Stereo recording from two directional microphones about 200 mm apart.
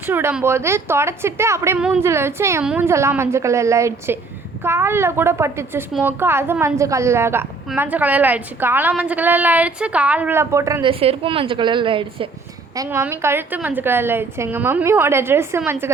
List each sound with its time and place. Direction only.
0.0 s a woman's voice: 10° right (ahead or behind)
11.0 s a woman's voice: 30° right (ahead or behind); by 15.9 s 10° right (ahead or behind)